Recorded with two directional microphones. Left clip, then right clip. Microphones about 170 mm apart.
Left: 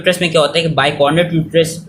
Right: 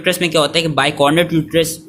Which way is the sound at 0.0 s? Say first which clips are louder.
Left 2 dB; 25° right (ahead or behind).